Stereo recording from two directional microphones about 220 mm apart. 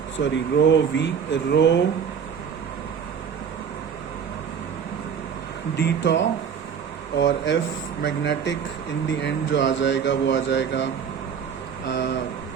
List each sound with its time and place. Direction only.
0.2 s speech: 55° left (ahead or behind)
5.7 s speech: 50° left (ahead or behind)